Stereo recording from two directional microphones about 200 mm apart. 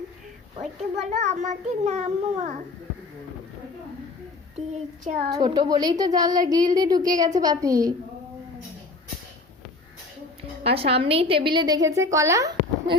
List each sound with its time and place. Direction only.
0.8 s a child's voice: 35° right (ahead or behind)
4.5 s a child's voice: 35° right (ahead or behind)
5.3 s a woman's voice: 20° right (ahead or behind)
10.6 s a woman's voice: 30° right (ahead or behind)